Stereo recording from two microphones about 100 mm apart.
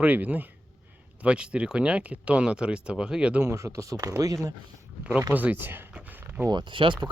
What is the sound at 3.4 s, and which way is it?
Speech, 30° right (ahead or behind).